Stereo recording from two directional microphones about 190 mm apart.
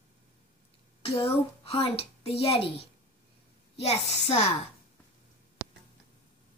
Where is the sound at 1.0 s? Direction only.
30° left (ahead or behind).